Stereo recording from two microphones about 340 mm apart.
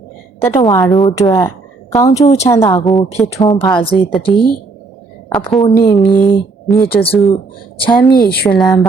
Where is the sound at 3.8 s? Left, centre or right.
Centre.